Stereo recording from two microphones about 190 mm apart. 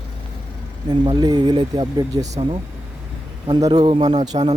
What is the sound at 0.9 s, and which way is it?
Speech, 20° right (ahead or behind).